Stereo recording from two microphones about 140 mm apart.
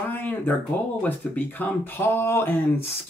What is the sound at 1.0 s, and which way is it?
Speech, 15° left (ahead or behind).